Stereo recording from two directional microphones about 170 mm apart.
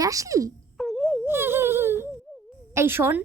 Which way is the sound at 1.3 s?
15° right (ahead or behind).